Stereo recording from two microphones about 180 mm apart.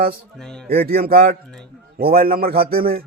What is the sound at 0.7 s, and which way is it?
Speech, 55° right (ahead or behind).